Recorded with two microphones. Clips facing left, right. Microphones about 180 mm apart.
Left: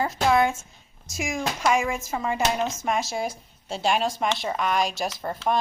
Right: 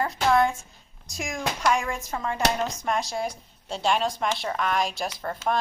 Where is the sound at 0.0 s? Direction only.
5° left (ahead or behind).